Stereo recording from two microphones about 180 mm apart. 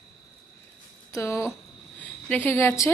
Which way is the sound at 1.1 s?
15° left (ahead or behind).